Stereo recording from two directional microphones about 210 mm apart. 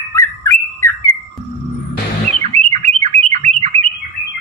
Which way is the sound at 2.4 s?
30° right (ahead or behind).